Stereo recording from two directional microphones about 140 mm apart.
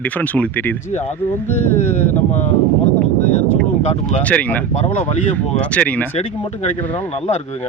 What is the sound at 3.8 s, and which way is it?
Speech, 50° left (ahead or behind).